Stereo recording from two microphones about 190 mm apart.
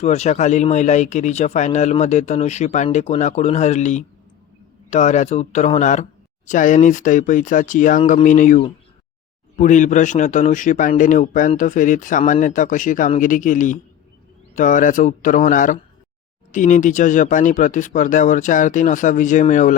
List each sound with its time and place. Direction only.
0.0 s a man's voice: 35° left (ahead or behind)